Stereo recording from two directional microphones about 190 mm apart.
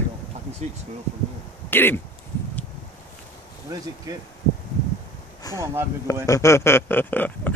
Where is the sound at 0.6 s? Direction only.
35° right (ahead or behind).